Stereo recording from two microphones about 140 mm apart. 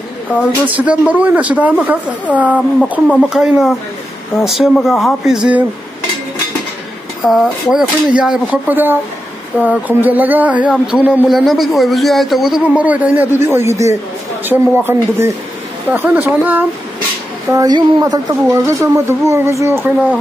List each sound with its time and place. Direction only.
0.8 s a man's voice: 10° right (ahead or behind)
7.2 s speech: centre (ahead or behind)
17.5 s speech: 25° right (ahead or behind)